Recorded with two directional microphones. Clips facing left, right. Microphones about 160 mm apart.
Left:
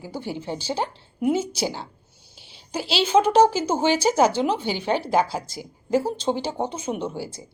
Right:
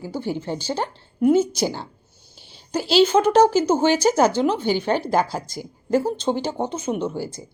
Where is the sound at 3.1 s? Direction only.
10° left (ahead or behind).